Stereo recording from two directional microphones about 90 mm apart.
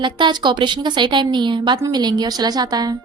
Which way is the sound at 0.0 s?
60° right (ahead or behind).